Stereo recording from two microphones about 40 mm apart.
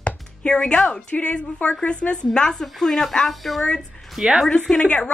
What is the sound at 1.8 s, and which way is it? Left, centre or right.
Speech, left.